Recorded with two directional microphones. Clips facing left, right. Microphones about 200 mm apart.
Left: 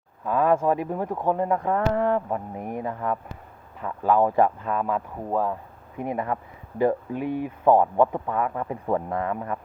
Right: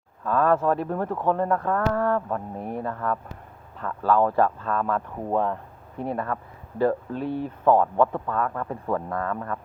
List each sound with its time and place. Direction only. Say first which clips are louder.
0.3 s speech: even; 15° left (ahead or behind)
6.0 s speech: left 1 dB; 15° left (ahead or behind)